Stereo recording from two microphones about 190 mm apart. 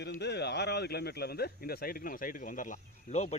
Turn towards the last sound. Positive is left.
turn(degrees=35)  # may be behind; listen again after turning